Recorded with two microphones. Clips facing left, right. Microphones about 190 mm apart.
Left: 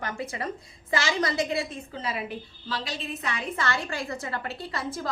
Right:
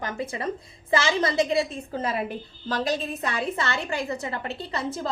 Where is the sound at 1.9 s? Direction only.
45° right (ahead or behind).